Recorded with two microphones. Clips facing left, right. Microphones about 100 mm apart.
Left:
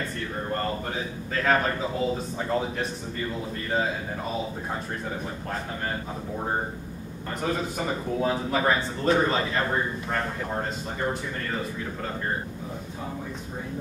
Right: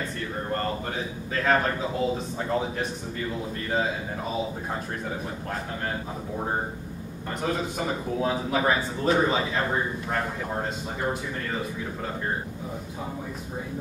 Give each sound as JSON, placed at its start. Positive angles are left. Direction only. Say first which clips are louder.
{"t": 0.0, "sound": "speech", "louder": "even", "side_deg": 0}
{"t": 5.5, "sound": "speech", "louder": "even", "side_deg": 0}